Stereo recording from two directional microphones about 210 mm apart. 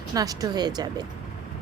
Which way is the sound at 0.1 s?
15° right (ahead or behind).